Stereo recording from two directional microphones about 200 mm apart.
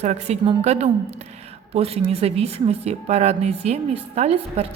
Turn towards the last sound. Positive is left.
turn(degrees=-30)  # may be behind; listen again after turning